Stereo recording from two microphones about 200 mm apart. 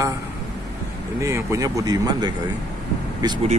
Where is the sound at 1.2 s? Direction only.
15° right (ahead or behind).